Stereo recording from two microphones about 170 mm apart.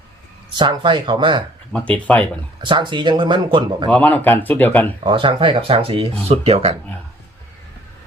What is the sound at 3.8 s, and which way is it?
Speech, 10° left (ahead or behind).